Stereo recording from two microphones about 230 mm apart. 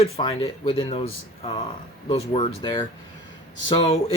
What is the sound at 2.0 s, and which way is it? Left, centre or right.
Speech, left.